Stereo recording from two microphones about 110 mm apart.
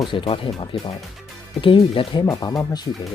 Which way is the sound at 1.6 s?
55° left (ahead or behind).